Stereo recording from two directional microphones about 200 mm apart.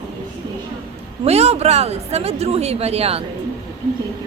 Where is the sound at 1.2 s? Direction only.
30° right (ahead or behind).